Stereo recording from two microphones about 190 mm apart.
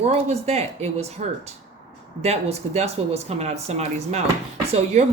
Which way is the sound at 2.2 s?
35° right (ahead or behind).